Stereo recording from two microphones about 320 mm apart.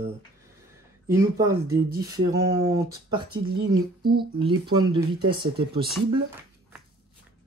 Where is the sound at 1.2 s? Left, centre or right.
Centre.